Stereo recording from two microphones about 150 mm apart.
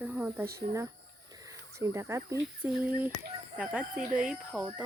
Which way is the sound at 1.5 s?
20° right (ahead or behind).